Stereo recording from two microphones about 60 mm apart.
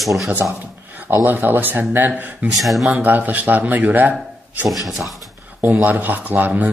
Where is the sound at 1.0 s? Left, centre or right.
Right.